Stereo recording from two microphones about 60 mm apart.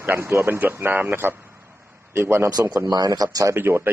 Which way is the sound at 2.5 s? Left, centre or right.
Right.